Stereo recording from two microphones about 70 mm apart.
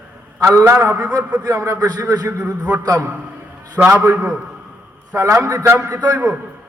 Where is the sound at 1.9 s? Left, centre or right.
Right.